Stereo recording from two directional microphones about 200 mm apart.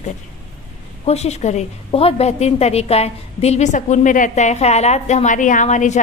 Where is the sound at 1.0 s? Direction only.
30° left (ahead or behind).